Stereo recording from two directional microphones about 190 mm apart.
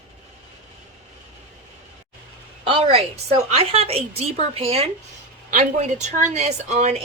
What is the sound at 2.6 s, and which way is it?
A woman's voice, 30° right (ahead or behind).